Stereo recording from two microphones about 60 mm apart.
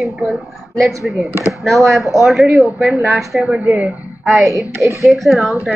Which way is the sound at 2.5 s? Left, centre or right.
Centre.